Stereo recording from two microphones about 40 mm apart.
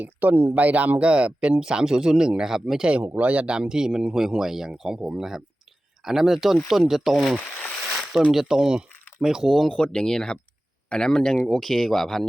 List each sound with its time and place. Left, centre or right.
0.0 s speech: right
0.5 s speech: right; by 2.8 s centre
3.2 s speech: right
3.4 s speech: right
9.6 s speech: left